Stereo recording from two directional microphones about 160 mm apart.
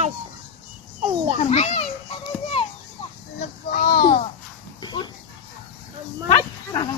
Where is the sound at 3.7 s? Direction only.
65° left (ahead or behind).